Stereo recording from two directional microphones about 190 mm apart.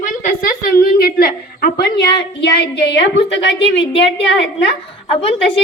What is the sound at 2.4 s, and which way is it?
Speech, 60° left (ahead or behind).